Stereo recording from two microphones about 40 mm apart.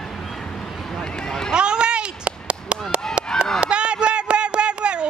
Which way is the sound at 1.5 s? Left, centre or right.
Right.